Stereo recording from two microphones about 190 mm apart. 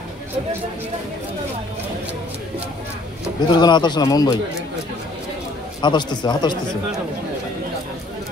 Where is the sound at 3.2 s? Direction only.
20° left (ahead or behind).